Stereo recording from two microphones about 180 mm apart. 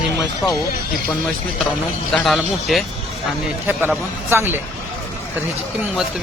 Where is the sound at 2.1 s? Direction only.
Centre (ahead or behind).